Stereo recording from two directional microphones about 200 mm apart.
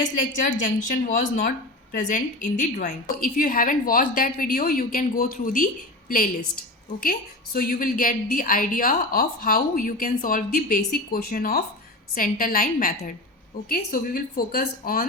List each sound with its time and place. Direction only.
0.2 s a woman's voice: 45° left (ahead or behind)